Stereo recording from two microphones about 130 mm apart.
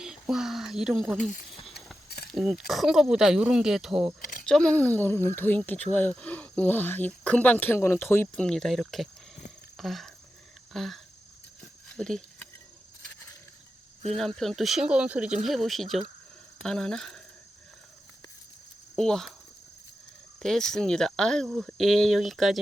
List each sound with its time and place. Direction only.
0.0 s speech: 5° right (ahead or behind)
4.2 s a sound: 90° left
4.4 s speech: 5° left (ahead or behind)
8.4 s speech: centre (ahead or behind)
10.7 s a sound: centre (ahead or behind)
14.2 s speech: centre (ahead or behind)
18.9 s speech: 5° left (ahead or behind)
20.4 s speech: 5° left (ahead or behind)